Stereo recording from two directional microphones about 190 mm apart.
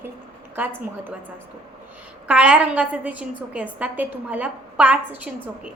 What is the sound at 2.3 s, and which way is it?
A woman's voice, 5° right (ahead or behind).